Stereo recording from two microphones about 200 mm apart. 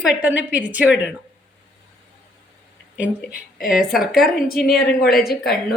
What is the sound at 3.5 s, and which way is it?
Speech, centre (ahead or behind).